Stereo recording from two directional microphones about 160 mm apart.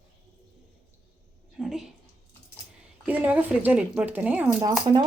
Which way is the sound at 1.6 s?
Centre (ahead or behind).